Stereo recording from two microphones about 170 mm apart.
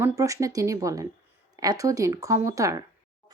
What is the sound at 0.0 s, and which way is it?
Speech, 20° right (ahead or behind).